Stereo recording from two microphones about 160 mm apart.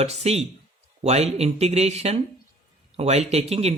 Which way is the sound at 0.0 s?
40° right (ahead or behind).